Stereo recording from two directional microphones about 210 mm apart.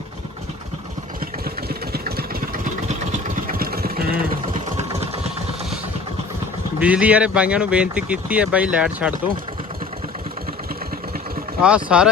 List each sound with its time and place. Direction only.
1.5 s vehicle: 45° right (ahead or behind)
4.8 s sewing machine: 30° right (ahead or behind)
6.7 s speech: 5° right (ahead or behind)
11.6 s speech: 5° right (ahead or behind)